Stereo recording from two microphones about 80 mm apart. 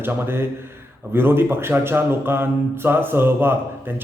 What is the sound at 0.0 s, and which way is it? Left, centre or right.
Speech, right.